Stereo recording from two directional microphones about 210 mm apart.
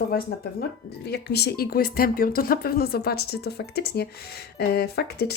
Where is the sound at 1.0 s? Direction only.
50° left (ahead or behind).